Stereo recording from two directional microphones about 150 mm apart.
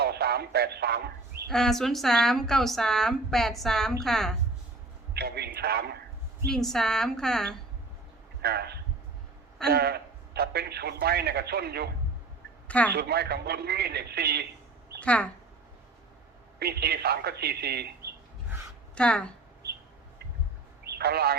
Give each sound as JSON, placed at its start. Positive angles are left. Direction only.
{"t": 0.0, "sound": "a sound", "side_deg": -90}
{"t": 1.5, "sound": "a woman's voice", "side_deg": 5}
{"t": 5.1, "sound": "a man's voice", "side_deg": -90}
{"t": 6.5, "sound": "a woman's voice", "side_deg": 0}
{"t": 8.4, "sound": "a man's voice", "side_deg": -90}
{"t": 12.6, "sound": "speech", "side_deg": 10}
{"t": 12.9, "sound": "a man's voice", "side_deg": -90}
{"t": 15.0, "sound": "speech", "side_deg": 10}
{"t": 16.6, "sound": "a man's voice", "side_deg": -90}
{"t": 18.9, "sound": "speech", "side_deg": 5}
{"t": 20.8, "sound": "a sound", "side_deg": -90}